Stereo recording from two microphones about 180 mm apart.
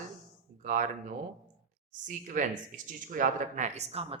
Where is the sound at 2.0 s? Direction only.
45° right (ahead or behind).